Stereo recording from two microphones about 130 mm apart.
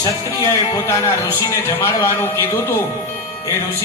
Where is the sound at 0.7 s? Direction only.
20° left (ahead or behind).